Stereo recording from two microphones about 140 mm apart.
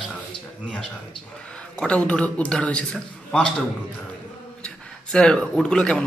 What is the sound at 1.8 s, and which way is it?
A man's voice, 5° left (ahead or behind).